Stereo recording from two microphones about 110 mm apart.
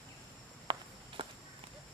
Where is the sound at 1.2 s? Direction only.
50° right (ahead or behind).